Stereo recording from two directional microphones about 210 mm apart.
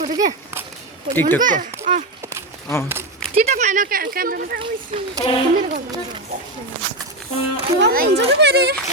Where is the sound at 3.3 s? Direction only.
35° right (ahead or behind).